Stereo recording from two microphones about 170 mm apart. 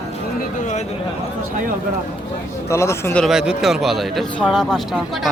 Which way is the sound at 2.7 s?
15° left (ahead or behind).